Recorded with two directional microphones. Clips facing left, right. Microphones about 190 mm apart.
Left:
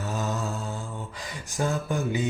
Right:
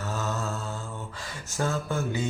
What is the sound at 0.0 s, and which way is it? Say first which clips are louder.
Mantra: left 2 dB; 15° left (ahead or behind).